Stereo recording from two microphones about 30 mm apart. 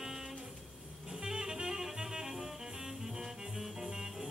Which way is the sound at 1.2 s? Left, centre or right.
Centre.